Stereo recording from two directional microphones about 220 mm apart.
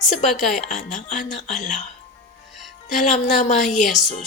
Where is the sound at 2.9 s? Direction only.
30° left (ahead or behind).